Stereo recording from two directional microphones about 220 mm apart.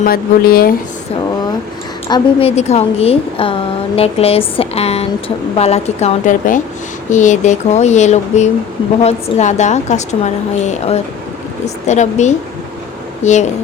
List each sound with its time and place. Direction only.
0.0 s speech: 40° left (ahead or behind)
2.0 s a woman's voice: 20° left (ahead or behind)
2.6 s a woman's voice: 30° left (ahead or behind)